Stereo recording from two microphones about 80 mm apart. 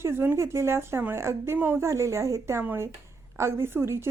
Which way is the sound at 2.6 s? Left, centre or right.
Right.